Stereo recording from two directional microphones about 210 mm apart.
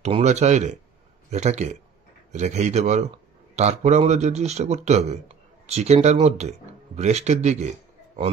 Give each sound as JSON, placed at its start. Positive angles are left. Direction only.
{"t": 0.0, "sound": "speech", "side_deg": -30}